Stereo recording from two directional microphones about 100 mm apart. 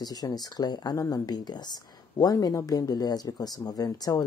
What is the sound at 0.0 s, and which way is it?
Speech, 40° left (ahead or behind).